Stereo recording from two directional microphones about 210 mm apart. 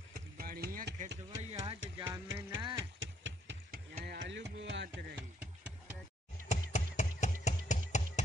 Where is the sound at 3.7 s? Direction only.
50° right (ahead or behind).